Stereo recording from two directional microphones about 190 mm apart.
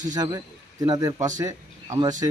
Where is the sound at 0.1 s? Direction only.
20° right (ahead or behind).